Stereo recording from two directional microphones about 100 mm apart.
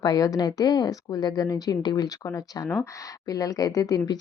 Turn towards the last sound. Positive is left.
turn(degrees=40)  # may be behind; listen again after turning